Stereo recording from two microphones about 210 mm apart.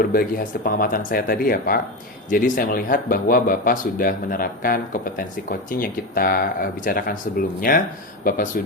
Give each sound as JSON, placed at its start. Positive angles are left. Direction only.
{"t": 0.0, "sound": "speech", "side_deg": 45}